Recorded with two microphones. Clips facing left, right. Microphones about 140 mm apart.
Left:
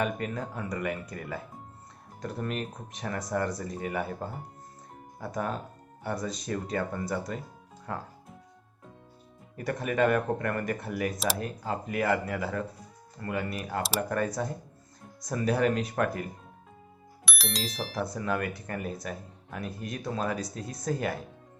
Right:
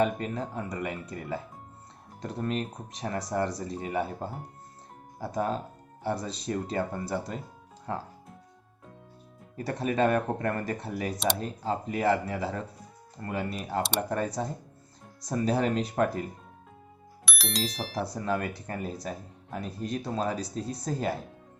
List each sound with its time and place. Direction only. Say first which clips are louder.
0.0 s speech: right 3 dB; 30° right (ahead or behind)
5.2 s speech: right 3 dB; 30° right (ahead or behind)
9.6 s speech: even; 30° right (ahead or behind)
17.2 s speech: right 2 dB; centre (ahead or behind)
18.0 s speech: even; 30° right (ahead or behind)